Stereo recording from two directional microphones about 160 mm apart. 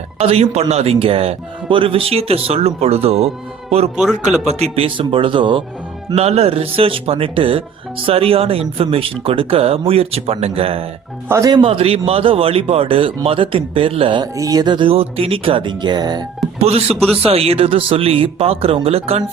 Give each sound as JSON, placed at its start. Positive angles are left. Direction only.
{"t": 0.2, "sound": "speech", "side_deg": -40}
{"t": 3.9, "sound": "speech", "side_deg": -5}
{"t": 4.4, "sound": "speech", "side_deg": -40}
{"t": 11.3, "sound": "speech", "side_deg": -20}
{"t": 14.3, "sound": "speech", "side_deg": -20}
{"t": 16.6, "sound": "speech", "side_deg": -40}